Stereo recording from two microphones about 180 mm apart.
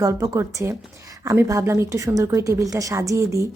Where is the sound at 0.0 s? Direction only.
20° right (ahead or behind).